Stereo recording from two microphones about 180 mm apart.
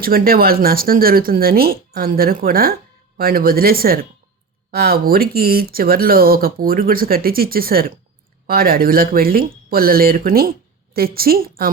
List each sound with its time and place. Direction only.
0.0 s speech: 55° right (ahead or behind)